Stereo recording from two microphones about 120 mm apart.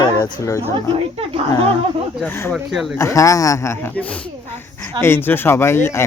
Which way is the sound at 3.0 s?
25° left (ahead or behind).